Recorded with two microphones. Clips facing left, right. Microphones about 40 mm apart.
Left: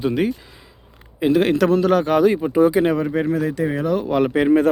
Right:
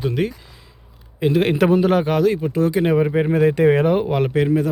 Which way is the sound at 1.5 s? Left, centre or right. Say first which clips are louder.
Even; centre.